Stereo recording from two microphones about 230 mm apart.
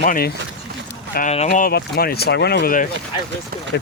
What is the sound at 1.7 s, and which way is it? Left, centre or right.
Speech, left.